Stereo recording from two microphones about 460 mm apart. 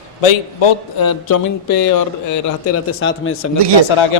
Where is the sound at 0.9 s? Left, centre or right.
Left.